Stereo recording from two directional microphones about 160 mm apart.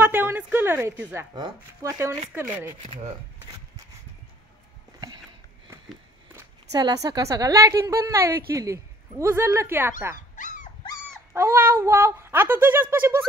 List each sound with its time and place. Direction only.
0.0 s a woman's voice: 15° right (ahead or behind)
6.3 s a woman's voice: 25° right (ahead or behind)
10.3 s dog: 50° left (ahead or behind)
11.3 s speech: 15° right (ahead or behind)